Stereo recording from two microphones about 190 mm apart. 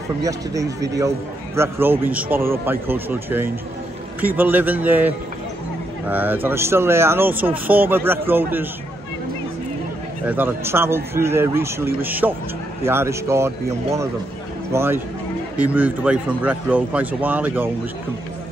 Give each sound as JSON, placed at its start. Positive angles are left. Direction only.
{"t": 0.2, "sound": "speech", "side_deg": -15}
{"t": 10.2, "sound": "speech", "side_deg": -10}
{"t": 14.7, "sound": "speech", "side_deg": -15}